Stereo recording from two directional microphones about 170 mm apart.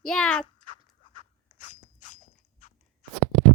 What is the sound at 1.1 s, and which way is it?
Crunch, 50° left (ahead or behind).